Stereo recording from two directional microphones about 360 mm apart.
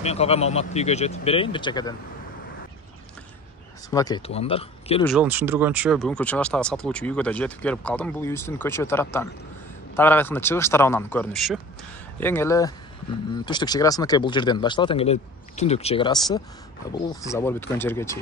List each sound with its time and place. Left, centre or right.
0.0 s speech: centre
3.9 s speech: centre
5.0 s speech: centre